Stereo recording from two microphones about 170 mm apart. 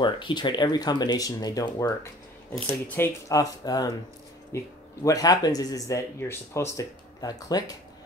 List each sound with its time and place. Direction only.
0.0 s speech: 25° left (ahead or behind)
3.0 s speech: 20° left (ahead or behind)